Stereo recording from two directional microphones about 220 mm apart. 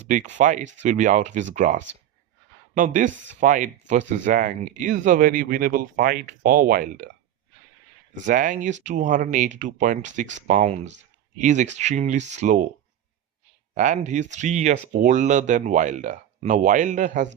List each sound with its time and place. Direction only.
0.0 s speech: 35° right (ahead or behind)
8.3 s speech: 35° right (ahead or behind)
13.7 s speech: 35° right (ahead or behind)